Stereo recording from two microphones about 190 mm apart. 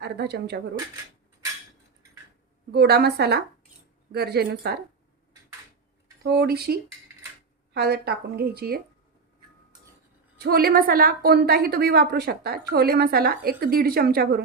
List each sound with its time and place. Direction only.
0.0 s a woman's voice: 60° right (ahead or behind)
2.7 s a woman's voice: 55° right (ahead or behind)
6.2 s a woman's voice: 60° right (ahead or behind)
10.4 s a woman's voice: 55° right (ahead or behind)